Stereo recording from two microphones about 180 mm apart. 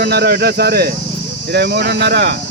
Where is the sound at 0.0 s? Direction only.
65° right (ahead or behind).